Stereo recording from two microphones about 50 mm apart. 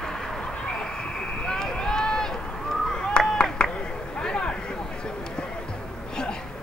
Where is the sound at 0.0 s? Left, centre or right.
Centre.